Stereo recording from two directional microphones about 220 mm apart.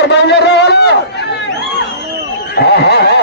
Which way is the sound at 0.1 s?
50° left (ahead or behind).